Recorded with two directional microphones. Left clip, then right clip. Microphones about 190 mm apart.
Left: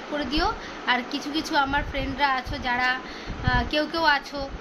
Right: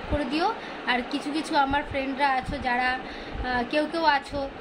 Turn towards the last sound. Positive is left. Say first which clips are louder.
# left 1 dB
turn(degrees=-15)  # may be behind; listen again after turning